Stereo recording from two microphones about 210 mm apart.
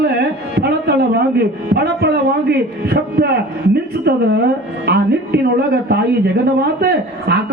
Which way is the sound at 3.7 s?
50° right (ahead or behind).